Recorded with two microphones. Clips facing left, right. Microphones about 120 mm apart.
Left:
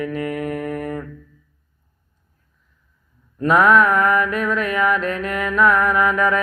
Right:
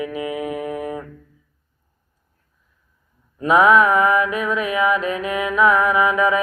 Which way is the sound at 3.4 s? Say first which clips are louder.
Right 1 dB; 5° right (ahead or behind).